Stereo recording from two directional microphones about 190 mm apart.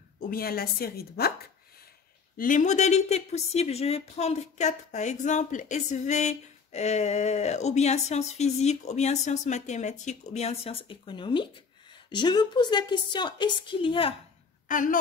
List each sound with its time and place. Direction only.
0.2 s a woman's voice: 50° left (ahead or behind)
2.3 s a woman's voice: 45° left (ahead or behind); by 14.1 s 25° left (ahead or behind)
14.7 s a woman's voice: 45° left (ahead or behind)